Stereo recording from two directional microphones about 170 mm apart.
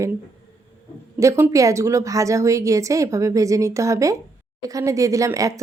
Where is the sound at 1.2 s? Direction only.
15° right (ahead or behind).